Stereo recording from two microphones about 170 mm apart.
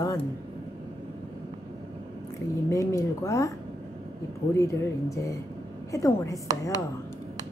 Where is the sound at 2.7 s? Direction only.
20° left (ahead or behind).